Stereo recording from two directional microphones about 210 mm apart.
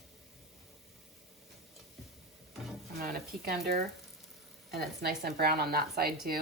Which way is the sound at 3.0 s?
45° right (ahead or behind).